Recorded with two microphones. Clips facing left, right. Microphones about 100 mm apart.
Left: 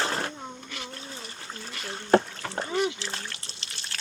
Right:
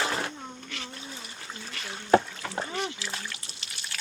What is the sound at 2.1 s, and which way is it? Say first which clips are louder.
Rowboat: even; 30° left (ahead or behind).